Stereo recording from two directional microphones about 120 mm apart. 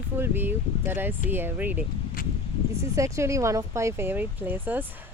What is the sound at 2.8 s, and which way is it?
Speech, 25° right (ahead or behind).